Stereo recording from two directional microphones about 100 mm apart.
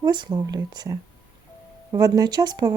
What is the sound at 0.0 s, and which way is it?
Speech, 50° right (ahead or behind).